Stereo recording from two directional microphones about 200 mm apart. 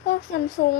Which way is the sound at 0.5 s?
50° left (ahead or behind).